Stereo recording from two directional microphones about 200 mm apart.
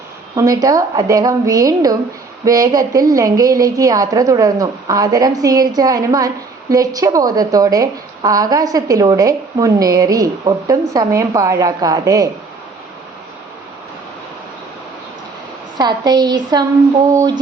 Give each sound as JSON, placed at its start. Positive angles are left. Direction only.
{"t": 0.3, "sound": "a woman's voice", "side_deg": -15}
{"t": 15.8, "sound": "a woman's voice", "side_deg": -20}